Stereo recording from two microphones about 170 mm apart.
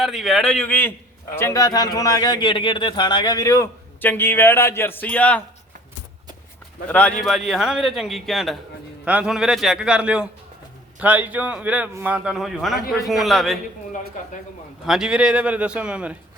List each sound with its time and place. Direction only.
0.0 s a man's voice: centre (ahead or behind)
6.8 s a man's voice: 10° left (ahead or behind)
14.8 s a man's voice: 5° right (ahead or behind)